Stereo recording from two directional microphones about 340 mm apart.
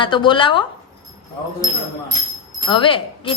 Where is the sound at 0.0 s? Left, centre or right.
Centre.